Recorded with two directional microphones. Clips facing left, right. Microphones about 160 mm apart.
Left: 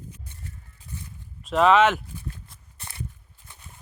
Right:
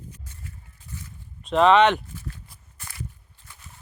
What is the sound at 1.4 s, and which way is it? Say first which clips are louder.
Speech: right 1 dB; 5° left (ahead or behind).